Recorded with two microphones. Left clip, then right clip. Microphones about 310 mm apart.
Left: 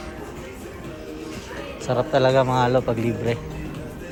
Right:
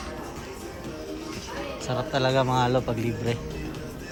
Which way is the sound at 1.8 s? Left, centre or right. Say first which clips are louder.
Left 7 dB; centre.